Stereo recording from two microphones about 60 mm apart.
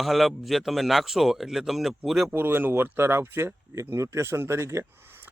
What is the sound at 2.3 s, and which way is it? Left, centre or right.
Speech, right.